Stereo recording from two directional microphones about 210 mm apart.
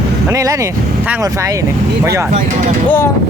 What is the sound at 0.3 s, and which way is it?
Speech, 15° right (ahead or behind).